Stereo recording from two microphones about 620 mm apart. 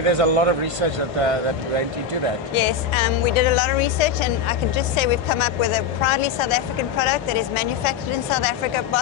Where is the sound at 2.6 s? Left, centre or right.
Left.